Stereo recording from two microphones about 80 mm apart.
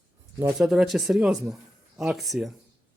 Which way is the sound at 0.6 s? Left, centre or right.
Centre.